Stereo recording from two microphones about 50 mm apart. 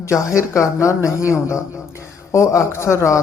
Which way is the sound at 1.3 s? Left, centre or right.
Left.